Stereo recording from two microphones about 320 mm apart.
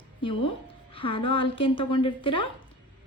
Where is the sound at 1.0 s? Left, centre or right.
Centre.